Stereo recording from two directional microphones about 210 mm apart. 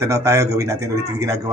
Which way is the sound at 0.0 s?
15° right (ahead or behind).